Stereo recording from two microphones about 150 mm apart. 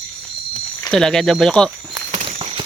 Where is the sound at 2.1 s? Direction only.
55° right (ahead or behind).